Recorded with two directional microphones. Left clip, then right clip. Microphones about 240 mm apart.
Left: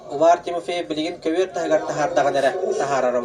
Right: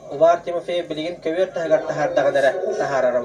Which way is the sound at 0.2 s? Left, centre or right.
Left.